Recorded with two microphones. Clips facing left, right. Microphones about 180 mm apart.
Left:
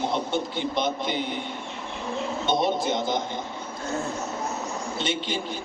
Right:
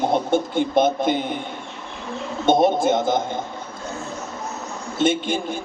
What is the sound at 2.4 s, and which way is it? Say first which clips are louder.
Speech: right 8 dB; 50° right (ahead or behind).